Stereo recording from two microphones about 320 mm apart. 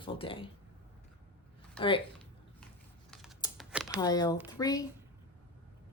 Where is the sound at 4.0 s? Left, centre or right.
Centre.